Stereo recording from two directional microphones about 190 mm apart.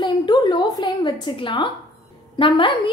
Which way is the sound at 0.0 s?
20° left (ahead or behind).